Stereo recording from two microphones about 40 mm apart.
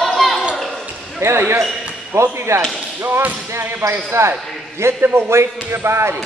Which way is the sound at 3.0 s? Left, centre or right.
Right.